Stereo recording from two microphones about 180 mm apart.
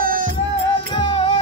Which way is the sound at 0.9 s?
30° left (ahead or behind).